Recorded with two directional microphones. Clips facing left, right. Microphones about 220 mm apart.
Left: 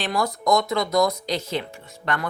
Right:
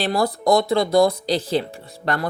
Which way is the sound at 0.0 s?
35° right (ahead or behind).